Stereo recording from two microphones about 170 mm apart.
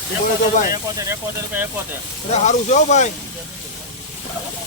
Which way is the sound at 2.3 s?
45° left (ahead or behind).